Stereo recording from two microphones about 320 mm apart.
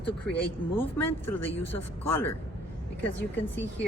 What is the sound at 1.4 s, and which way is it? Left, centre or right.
Speech, left.